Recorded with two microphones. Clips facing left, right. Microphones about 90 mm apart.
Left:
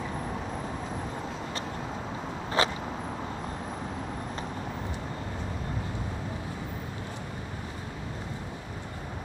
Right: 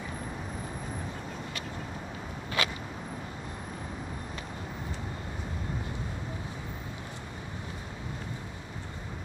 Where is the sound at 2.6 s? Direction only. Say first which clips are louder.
Left 5 dB; 30° left (ahead or behind).